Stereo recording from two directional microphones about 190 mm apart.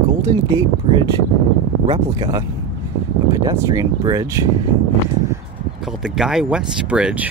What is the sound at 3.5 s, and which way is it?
Speech, 15° right (ahead or behind).